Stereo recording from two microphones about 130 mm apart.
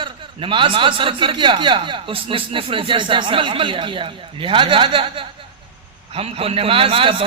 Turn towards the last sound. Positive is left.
turn(degrees=-45)  # may be behind; listen again after turning